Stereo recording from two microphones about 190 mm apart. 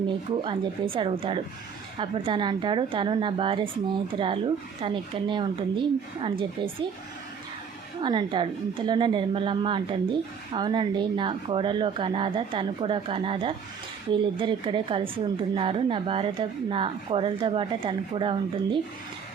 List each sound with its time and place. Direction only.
0.3 s a woman's voice: 25° right (ahead or behind)
8.0 s a woman's voice: 25° right (ahead or behind)